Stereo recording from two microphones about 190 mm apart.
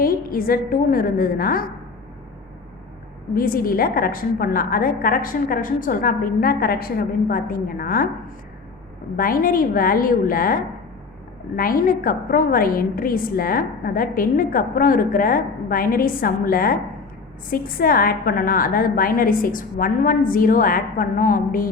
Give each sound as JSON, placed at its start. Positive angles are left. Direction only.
{"t": 0.0, "sound": "a woman's voice", "side_deg": 50}
{"t": 3.3, "sound": "a woman's voice", "side_deg": 50}
{"t": 9.1, "sound": "a woman's voice", "side_deg": 50}